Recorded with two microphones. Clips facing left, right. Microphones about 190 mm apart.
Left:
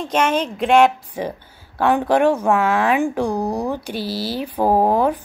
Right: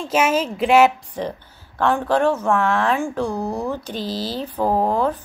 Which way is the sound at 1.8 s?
15° left (ahead or behind).